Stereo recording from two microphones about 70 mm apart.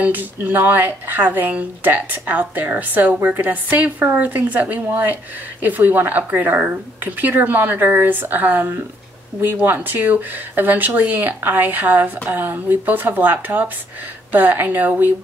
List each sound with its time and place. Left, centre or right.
0.0 s speech: right